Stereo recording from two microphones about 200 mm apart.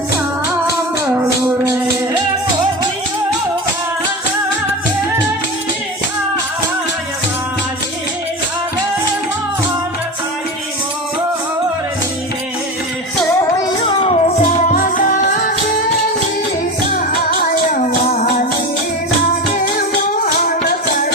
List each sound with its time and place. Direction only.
1.1 s music: 15° right (ahead or behind)
13.6 s music: 25° left (ahead or behind); by 15.5 s 40° left (ahead or behind)
17.1 s music: 40° left (ahead or behind)
19.5 s music: 40° left (ahead or behind)